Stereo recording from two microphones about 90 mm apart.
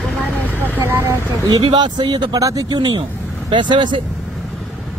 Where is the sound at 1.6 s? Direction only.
55° right (ahead or behind).